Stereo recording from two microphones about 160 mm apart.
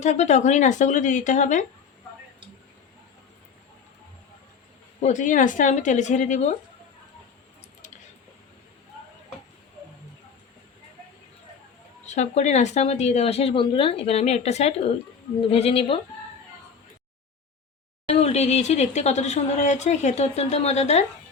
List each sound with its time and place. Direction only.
0.0 s speech: 45° left (ahead or behind)
5.0 s speech: 50° left (ahead or behind)
12.0 s speech: 45° left (ahead or behind)
18.1 s speech: 40° left (ahead or behind)